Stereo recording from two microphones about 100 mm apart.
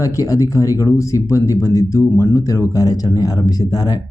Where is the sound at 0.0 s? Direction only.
35° left (ahead or behind).